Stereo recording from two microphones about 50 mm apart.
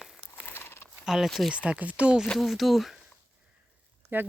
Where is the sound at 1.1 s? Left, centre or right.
Centre.